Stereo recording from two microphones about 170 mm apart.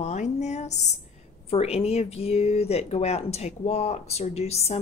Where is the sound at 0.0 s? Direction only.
40° left (ahead or behind).